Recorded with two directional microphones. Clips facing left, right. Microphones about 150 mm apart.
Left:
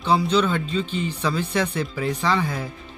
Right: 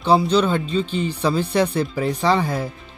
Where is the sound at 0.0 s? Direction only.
35° right (ahead or behind).